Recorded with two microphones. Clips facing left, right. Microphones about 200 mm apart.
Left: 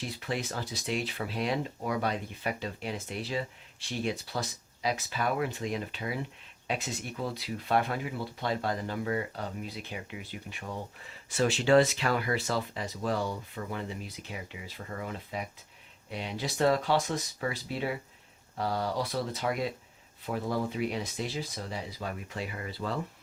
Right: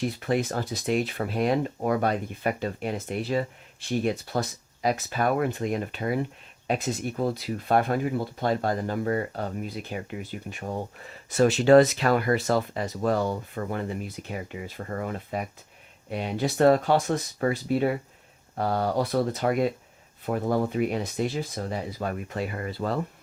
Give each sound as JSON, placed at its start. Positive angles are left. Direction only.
{"t": 0.0, "sound": "speech", "side_deg": -50}